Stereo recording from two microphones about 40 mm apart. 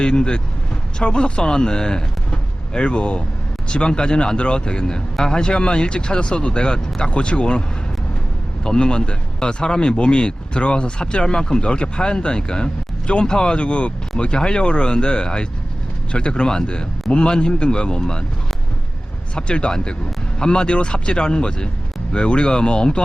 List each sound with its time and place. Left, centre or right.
0.0 s speech: left
8.6 s speech: left
19.4 s speech: left